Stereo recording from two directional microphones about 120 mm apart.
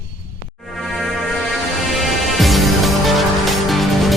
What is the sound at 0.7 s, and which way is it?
Music, centre (ahead or behind).